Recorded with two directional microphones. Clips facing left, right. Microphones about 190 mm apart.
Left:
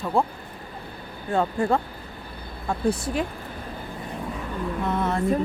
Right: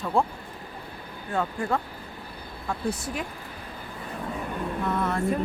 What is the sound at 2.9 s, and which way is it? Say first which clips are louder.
Speech: left 7 dB; 30° left (ahead or behind).